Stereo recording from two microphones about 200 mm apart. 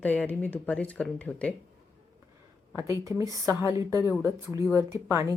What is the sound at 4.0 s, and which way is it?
Speech, 15° left (ahead or behind).